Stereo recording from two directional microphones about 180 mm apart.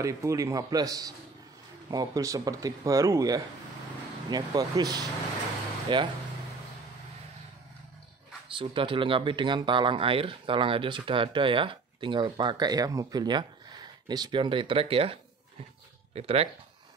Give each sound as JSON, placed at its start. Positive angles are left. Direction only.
{"t": 0.0, "sound": "speech", "side_deg": -15}
{"t": 8.5, "sound": "speech", "side_deg": -30}
{"t": 16.2, "sound": "speech", "side_deg": -35}